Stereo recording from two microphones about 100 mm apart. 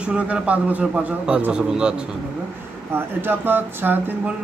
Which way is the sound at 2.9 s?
20° right (ahead or behind).